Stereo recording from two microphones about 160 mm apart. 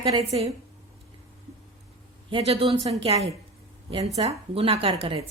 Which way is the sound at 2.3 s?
35° right (ahead or behind).